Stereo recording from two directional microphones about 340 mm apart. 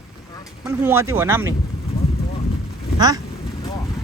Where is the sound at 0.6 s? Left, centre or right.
Centre.